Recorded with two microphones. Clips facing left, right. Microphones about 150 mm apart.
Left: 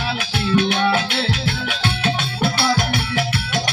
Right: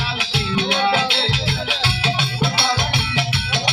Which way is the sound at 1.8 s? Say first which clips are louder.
Left 3 dB; 50° left (ahead or behind).